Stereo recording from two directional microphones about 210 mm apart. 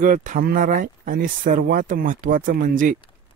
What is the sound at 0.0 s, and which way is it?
Speech, 40° right (ahead or behind).